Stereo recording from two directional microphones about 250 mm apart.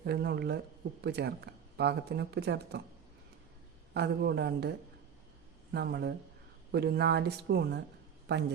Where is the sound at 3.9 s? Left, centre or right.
Right.